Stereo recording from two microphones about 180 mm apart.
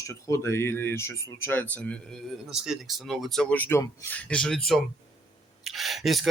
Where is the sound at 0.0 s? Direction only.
15° left (ahead or behind).